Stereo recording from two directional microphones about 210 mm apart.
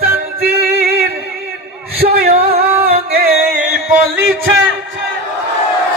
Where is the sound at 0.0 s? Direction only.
45° right (ahead or behind).